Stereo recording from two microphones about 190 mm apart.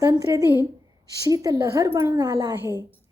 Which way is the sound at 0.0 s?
20° right (ahead or behind).